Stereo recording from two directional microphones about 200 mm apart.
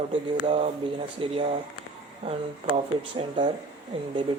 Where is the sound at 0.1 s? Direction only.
30° right (ahead or behind).